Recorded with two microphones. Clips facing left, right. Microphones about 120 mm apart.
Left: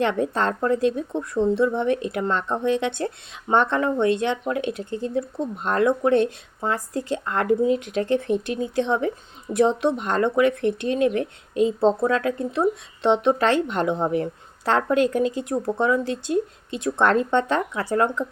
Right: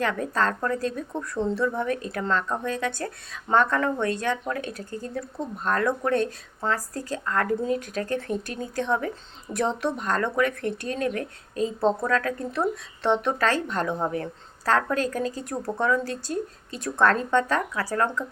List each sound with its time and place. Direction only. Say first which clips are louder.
0.0 s a woman's voice: left 3 dB; 25° left (ahead or behind)